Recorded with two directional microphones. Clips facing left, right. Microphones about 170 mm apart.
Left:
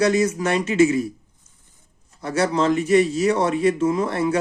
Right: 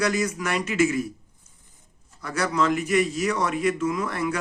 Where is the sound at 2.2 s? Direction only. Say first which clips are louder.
Left 4 dB; 25° left (ahead or behind).